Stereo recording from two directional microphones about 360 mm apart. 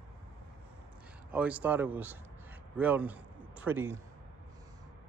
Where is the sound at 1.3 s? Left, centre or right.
Centre.